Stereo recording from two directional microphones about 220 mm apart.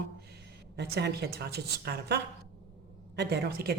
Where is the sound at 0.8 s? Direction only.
45° right (ahead or behind).